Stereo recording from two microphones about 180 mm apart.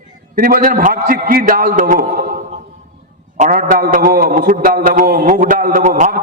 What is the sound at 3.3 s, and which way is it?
A man's voice, 45° right (ahead or behind).